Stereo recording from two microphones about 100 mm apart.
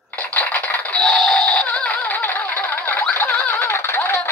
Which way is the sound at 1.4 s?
10° left (ahead or behind).